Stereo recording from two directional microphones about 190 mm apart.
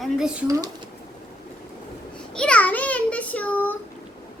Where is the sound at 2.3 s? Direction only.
5° left (ahead or behind).